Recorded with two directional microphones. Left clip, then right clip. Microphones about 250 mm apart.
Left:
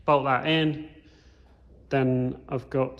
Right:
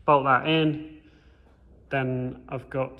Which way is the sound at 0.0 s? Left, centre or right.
Centre.